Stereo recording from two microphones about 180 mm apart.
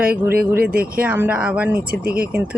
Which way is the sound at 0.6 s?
55° right (ahead or behind).